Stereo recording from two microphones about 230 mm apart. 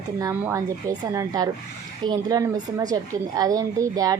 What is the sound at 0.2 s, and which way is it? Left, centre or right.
A woman's voice, centre.